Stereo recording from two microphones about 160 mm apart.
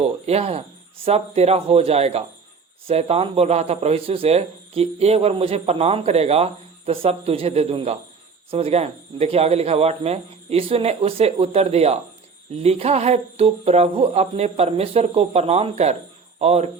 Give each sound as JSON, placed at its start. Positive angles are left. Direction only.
{"t": 0.0, "sound": "speech", "side_deg": -40}